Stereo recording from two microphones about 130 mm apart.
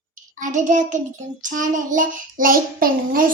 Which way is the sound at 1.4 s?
80° right.